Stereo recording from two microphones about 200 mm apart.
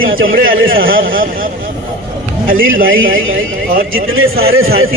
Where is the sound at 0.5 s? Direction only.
80° right.